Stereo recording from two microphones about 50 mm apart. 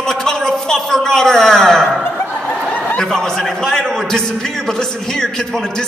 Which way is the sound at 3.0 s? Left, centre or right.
Centre.